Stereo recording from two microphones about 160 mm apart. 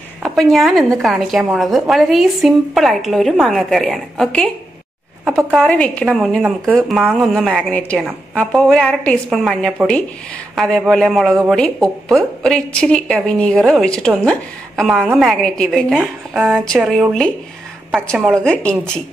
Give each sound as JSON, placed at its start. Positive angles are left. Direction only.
{"t": 0.2, "sound": "speech", "side_deg": 0}
{"t": 5.6, "sound": "speech", "side_deg": 5}